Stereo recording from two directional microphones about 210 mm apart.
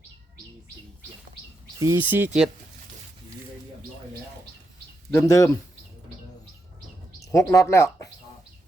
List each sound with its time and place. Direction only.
1.8 s speech: 10° right (ahead or behind)
5.1 s speech: 15° left (ahead or behind)
7.2 s speech: 15° left (ahead or behind)